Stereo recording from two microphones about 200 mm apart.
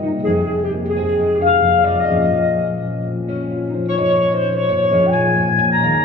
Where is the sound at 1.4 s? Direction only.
35° right (ahead or behind).